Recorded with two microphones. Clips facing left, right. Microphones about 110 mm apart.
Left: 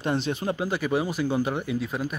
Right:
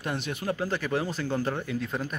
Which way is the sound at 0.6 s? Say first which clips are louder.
Left 3 dB; 15° left (ahead or behind).